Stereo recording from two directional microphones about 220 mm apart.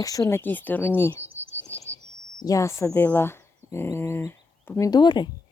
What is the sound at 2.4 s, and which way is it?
Speech, 15° left (ahead or behind).